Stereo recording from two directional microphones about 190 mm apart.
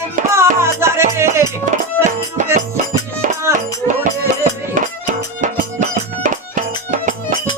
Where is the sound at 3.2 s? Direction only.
45° right (ahead or behind).